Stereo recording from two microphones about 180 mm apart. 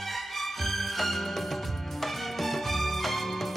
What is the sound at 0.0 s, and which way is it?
Music, centre (ahead or behind).